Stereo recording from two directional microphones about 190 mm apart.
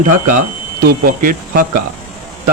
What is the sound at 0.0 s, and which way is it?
Speech, 45° right (ahead or behind).